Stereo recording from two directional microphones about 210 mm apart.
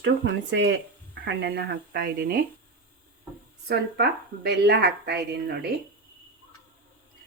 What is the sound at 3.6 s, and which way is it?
Speech, 50° right (ahead or behind).